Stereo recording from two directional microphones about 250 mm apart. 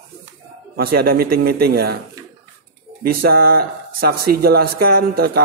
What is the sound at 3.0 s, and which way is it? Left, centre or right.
Speech, right.